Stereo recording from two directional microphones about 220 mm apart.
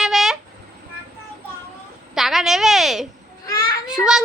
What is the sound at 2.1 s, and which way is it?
Speech, centre (ahead or behind).